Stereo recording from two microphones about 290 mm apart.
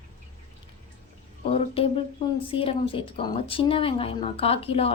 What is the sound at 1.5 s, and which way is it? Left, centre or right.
Speech, centre.